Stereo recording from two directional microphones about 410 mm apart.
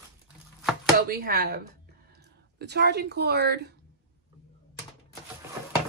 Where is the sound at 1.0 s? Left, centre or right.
Right.